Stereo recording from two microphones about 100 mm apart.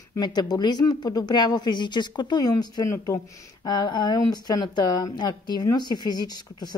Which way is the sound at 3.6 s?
45° left (ahead or behind).